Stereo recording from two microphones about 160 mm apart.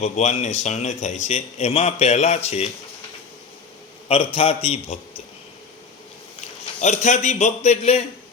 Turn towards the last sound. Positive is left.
turn(degrees=45)  # may be behind; listen again after turning